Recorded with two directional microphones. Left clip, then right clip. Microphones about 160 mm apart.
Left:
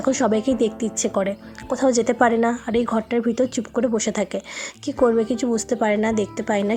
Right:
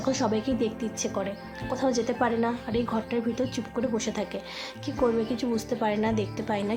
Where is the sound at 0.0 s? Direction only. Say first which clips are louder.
Left 7 dB; 35° left (ahead or behind).